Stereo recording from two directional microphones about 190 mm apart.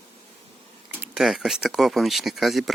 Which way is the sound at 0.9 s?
5° right (ahead or behind).